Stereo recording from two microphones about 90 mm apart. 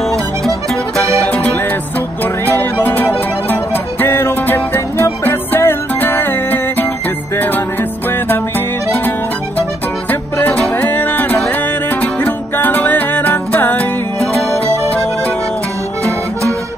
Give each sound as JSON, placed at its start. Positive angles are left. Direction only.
{"t": 2.6, "sound": "music", "side_deg": 20}
{"t": 10.4, "sound": "music", "side_deg": 20}